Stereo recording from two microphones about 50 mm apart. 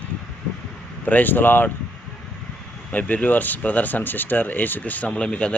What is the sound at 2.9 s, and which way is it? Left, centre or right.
Speech, left.